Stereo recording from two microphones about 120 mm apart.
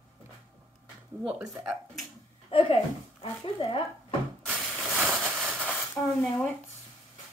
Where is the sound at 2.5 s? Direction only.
50° left (ahead or behind).